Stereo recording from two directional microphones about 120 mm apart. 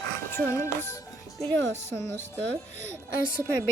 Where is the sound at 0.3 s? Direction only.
20° left (ahead or behind).